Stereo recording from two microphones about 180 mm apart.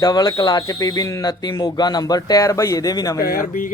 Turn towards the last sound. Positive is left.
turn(degrees=50)  # may be behind; listen again after turning